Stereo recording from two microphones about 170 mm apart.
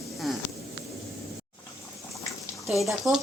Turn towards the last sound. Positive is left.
turn(degrees=0)  # may be behind; listen again after turning